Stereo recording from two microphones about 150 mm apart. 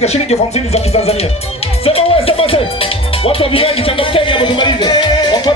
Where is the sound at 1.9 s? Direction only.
40° left (ahead or behind).